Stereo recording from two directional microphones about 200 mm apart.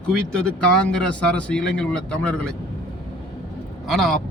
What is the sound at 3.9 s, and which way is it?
Speech, centre (ahead or behind).